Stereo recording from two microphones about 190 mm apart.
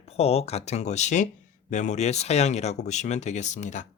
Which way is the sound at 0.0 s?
30° left (ahead or behind).